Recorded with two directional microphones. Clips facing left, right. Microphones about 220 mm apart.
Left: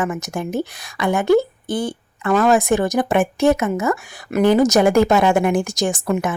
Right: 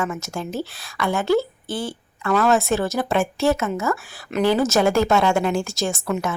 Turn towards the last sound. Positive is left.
turn(degrees=20)  # may be behind; listen again after turning